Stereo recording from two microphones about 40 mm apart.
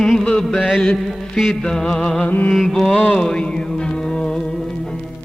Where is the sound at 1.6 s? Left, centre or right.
Centre.